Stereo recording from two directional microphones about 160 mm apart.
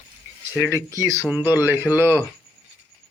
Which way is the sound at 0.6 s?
15° right (ahead or behind).